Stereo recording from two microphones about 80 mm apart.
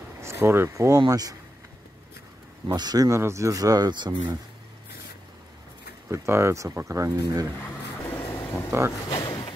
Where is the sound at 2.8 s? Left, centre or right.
Right.